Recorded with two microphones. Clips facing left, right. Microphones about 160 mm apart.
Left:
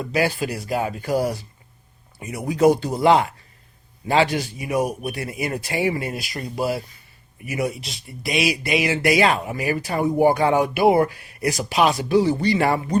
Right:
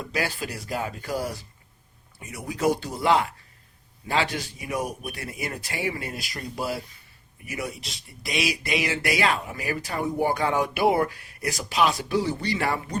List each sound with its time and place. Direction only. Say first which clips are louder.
0.1 s speech: left 8 dB; 10° left (ahead or behind)
2.5 s speech: left 8 dB; 20° left (ahead or behind)